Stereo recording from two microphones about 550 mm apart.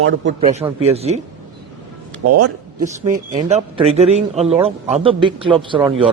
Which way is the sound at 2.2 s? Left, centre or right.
Right.